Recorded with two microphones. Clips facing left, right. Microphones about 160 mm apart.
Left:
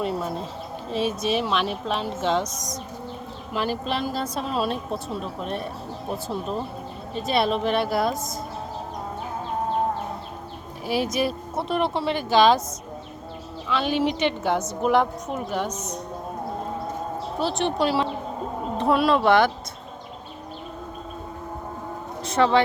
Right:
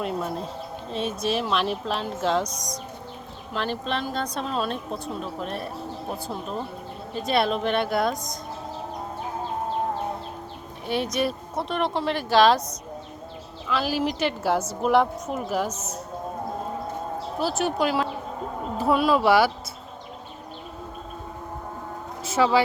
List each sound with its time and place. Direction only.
0.0 s a woman's voice: centre (ahead or behind)
7.1 s a woman's voice: centre (ahead or behind)
10.8 s a woman's voice: 5° left (ahead or behind)
13.7 s a woman's voice: centre (ahead or behind)
17.4 s a woman's voice: 5° right (ahead or behind)
22.2 s a sound: 5° right (ahead or behind)